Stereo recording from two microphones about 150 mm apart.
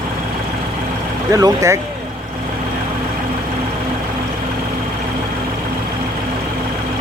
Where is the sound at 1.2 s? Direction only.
25° right (ahead or behind).